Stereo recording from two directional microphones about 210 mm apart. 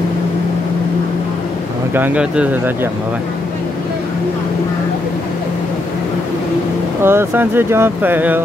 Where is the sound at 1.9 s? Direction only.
10° right (ahead or behind).